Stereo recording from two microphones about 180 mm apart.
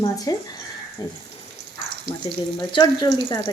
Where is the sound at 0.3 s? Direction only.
20° left (ahead or behind).